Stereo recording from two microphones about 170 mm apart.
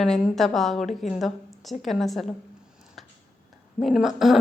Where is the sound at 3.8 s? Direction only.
Centre (ahead or behind).